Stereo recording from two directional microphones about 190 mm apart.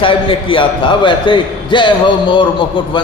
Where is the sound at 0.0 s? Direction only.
30° left (ahead or behind).